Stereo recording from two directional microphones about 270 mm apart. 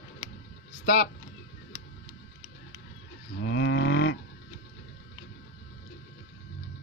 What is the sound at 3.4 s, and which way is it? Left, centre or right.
Livestock, left.